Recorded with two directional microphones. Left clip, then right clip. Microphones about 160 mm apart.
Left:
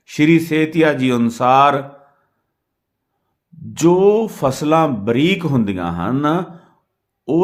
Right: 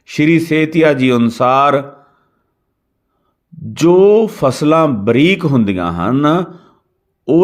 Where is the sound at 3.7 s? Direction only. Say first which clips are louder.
Right 4 dB; 20° right (ahead or behind).